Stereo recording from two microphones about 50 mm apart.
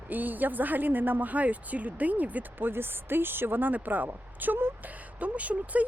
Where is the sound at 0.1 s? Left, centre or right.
Right.